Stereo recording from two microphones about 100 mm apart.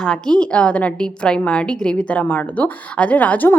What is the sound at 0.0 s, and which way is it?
A woman's voice, 10° left (ahead or behind).